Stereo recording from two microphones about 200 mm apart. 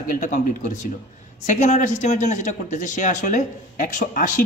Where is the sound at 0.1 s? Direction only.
40° left (ahead or behind).